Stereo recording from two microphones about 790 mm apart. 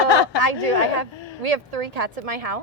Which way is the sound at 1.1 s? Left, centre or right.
Left.